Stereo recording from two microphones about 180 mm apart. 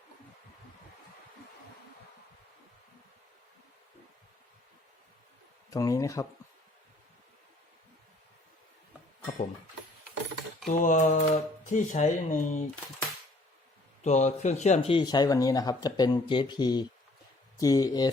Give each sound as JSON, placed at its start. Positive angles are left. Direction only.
{"t": 5.7, "sound": "speech", "side_deg": 20}
{"t": 10.7, "sound": "speech", "side_deg": 45}
{"t": 14.0, "sound": "speech", "side_deg": 40}